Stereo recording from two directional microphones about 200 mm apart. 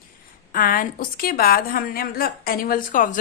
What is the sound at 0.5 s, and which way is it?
A woman's voice, 45° left (ahead or behind).